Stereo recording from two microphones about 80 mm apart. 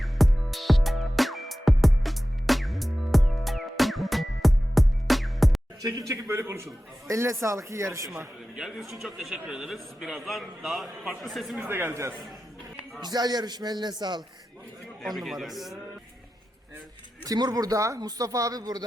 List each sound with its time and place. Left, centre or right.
0.0 s music: centre
5.8 s a man's voice: right
8.5 s a man's voice: centre
11.7 s a man's voice: right
13.0 s speech: right
15.0 s a man's voice: centre
17.2 s speech: right